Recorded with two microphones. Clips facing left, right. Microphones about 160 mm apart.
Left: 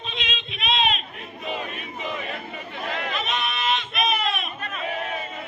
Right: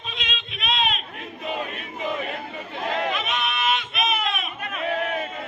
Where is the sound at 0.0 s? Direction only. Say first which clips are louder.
Left 2 dB; centre (ahead or behind).